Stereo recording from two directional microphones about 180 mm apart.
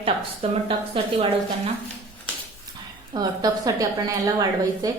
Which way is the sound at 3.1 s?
20° right (ahead or behind).